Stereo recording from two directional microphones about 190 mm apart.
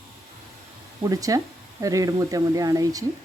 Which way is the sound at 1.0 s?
20° right (ahead or behind).